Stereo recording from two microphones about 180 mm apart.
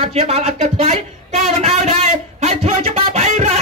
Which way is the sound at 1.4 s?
35° right (ahead or behind).